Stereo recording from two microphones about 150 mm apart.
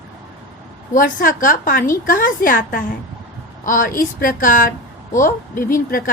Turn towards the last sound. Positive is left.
turn(degrees=75)  # may be behind; listen again after turning